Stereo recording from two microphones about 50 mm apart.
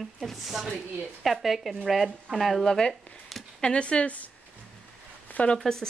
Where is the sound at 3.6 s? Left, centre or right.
Left.